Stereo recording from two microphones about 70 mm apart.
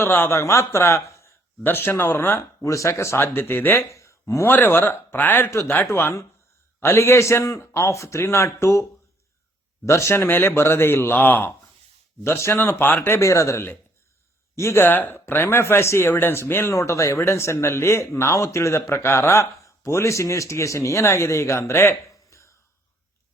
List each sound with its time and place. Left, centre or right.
0.0 s speech: left
1.6 s speech: left
2.6 s speech: left
3.2 s speech: left
3.9 s a sound: left
4.4 s speech: left
5.1 s speech: left
10.2 s speech: left
12.2 s speech: left
14.8 s speech: left
16.7 s speech: left